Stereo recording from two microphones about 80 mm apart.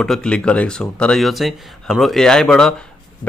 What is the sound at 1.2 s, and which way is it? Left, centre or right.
Speech, centre.